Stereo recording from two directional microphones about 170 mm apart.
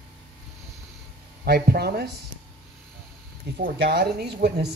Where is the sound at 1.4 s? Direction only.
65° right (ahead or behind).